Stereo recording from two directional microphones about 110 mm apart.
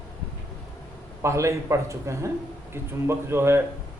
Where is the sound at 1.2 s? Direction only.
25° right (ahead or behind).